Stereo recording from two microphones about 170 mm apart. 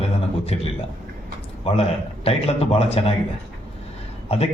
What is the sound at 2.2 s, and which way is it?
Speech, 35° left (ahead or behind).